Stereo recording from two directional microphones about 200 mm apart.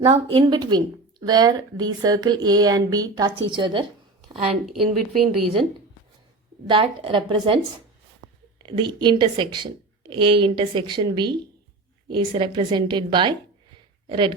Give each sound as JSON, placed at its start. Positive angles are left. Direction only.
{"t": 0.0, "sound": "a woman's voice", "side_deg": -30}
{"t": 4.6, "sound": "a woman's voice", "side_deg": 0}
{"t": 6.7, "sound": "a woman's voice", "side_deg": -25}
{"t": 8.6, "sound": "a woman's voice", "side_deg": -20}